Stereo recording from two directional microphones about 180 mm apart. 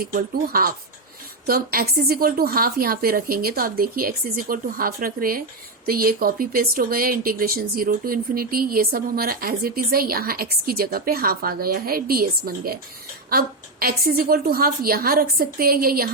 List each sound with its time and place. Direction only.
0.0 s speech: 55° right (ahead or behind)